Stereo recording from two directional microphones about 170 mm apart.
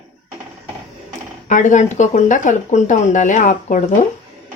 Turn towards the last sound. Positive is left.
turn(degrees=50)  # may be behind; listen again after turning